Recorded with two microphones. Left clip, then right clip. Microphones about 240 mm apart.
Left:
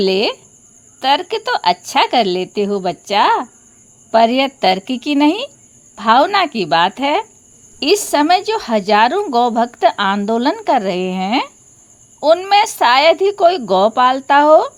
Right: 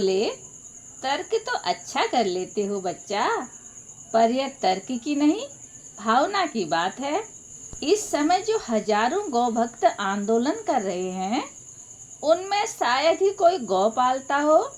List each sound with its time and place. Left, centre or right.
0.0 s speech: left